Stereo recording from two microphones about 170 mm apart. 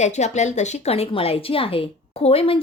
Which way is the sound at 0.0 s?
45° left (ahead or behind).